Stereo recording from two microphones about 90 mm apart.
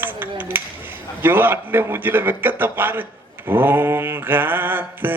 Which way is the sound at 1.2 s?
25° right (ahead or behind).